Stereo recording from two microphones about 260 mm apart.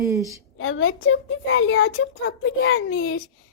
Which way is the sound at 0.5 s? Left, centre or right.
Left.